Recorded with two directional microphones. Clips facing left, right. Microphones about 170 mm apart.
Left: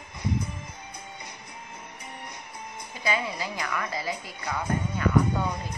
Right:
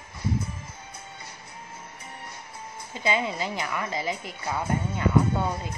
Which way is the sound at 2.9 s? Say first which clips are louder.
Right 3 dB; 25° right (ahead or behind).